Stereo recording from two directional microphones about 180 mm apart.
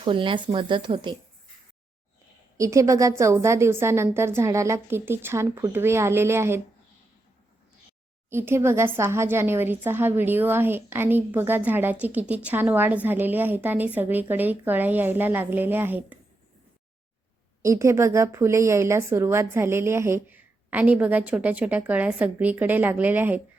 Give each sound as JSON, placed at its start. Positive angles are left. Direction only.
{"t": 0.0, "sound": "speech", "side_deg": -30}
{"t": 2.6, "sound": "a woman's voice", "side_deg": -15}
{"t": 8.3, "sound": "a woman's voice", "side_deg": -15}
{"t": 17.6, "sound": "a woman's voice", "side_deg": -15}